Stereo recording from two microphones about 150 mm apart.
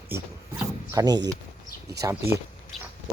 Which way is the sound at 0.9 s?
25° right (ahead or behind).